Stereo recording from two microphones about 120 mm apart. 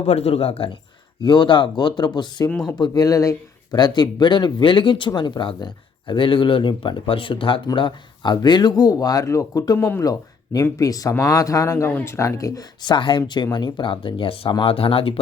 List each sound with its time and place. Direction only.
0.0 s speech: 60° left (ahead or behind)
1.2 s speech: 40° left (ahead or behind)